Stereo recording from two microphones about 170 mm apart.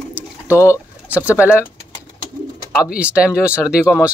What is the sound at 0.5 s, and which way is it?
Speech, 15° left (ahead or behind).